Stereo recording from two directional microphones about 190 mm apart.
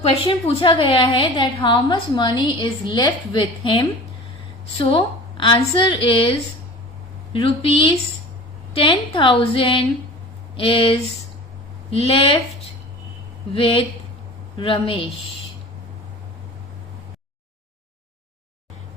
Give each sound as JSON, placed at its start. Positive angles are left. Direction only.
{"t": 0.0, "sound": "a woman's voice", "side_deg": 30}
{"t": 4.9, "sound": "a woman's voice", "side_deg": 25}
{"t": 7.3, "sound": "a woman's voice", "side_deg": 30}
{"t": 13.5, "sound": "a woman's voice", "side_deg": 30}